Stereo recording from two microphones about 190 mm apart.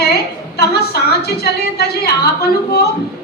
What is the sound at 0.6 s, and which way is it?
A woman's voice, 55° left (ahead or behind).